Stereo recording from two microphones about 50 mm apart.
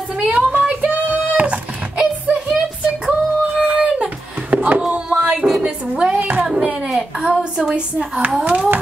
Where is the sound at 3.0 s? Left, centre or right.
Centre.